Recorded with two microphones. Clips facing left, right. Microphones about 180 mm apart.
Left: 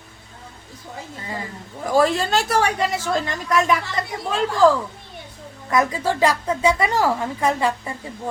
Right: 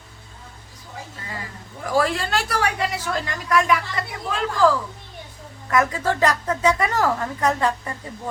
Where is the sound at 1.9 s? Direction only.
25° left (ahead or behind).